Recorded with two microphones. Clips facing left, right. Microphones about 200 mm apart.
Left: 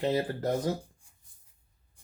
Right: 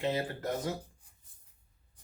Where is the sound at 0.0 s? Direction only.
35° left (ahead or behind).